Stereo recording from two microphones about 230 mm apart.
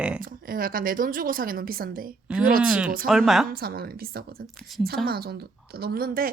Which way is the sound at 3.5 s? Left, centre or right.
Right.